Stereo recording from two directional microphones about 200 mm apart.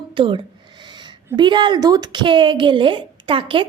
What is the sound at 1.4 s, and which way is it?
A woman's voice, 20° right (ahead or behind).